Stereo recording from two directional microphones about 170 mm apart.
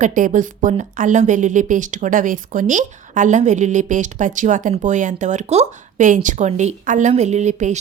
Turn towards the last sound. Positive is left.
turn(degrees=-45)  # may be behind; listen again after turning